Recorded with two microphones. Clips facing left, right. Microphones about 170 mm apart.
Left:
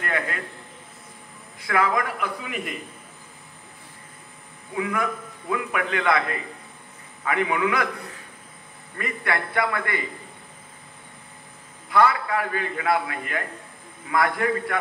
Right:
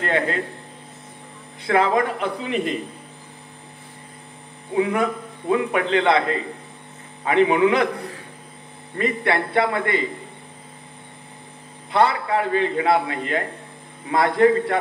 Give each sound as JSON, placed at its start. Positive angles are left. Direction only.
{"t": 0.0, "sound": "a man's voice", "side_deg": -25}
{"t": 1.6, "sound": "a man's voice", "side_deg": -30}
{"t": 4.7, "sound": "a man's voice", "side_deg": -25}
{"t": 8.9, "sound": "a man's voice", "side_deg": -25}
{"t": 11.9, "sound": "a man's voice", "side_deg": -25}